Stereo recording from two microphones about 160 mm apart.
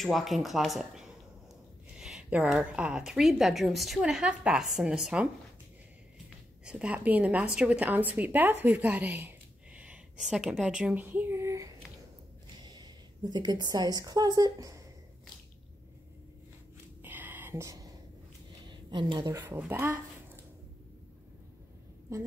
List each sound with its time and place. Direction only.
0.0 s a woman's voice: centre (ahead or behind)
2.0 s a sound: 5° right (ahead or behind)
2.4 s a woman's voice: 5° right (ahead or behind)
6.6 s a woman's voice: 5° right (ahead or behind); by 14.8 s 25° right (ahead or behind)
17.0 s a sound: 10° right (ahead or behind)
18.7 s a woman's voice: 30° right (ahead or behind)
19.3 s a woman's voice: 15° right (ahead or behind)